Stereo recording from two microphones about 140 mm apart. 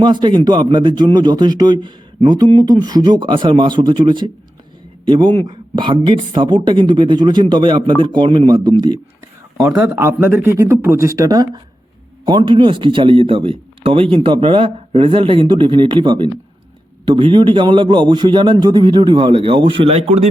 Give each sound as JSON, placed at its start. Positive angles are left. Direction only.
{"t": 0.0, "sound": "a man's voice", "side_deg": -35}
{"t": 9.6, "sound": "a man's voice", "side_deg": -5}